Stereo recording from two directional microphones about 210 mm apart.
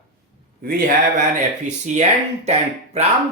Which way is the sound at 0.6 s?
45° right (ahead or behind).